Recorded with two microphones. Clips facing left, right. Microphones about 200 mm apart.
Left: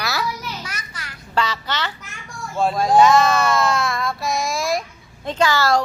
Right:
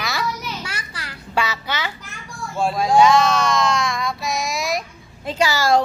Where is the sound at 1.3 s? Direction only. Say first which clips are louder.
Left 1 dB; 10° right (ahead or behind).